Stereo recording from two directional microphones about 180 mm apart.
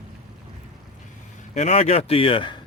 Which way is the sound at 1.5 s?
35° left (ahead or behind).